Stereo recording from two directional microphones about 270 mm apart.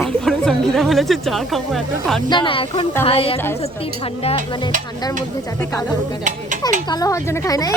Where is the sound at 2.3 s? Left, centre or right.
Centre.